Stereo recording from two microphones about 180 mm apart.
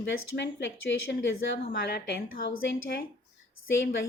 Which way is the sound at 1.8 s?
65° left (ahead or behind).